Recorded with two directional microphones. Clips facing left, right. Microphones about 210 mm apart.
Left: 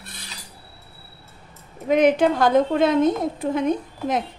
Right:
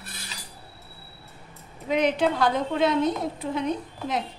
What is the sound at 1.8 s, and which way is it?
A woman's voice, 50° left (ahead or behind).